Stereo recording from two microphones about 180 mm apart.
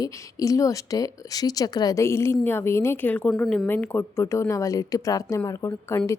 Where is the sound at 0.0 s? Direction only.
20° left (ahead or behind).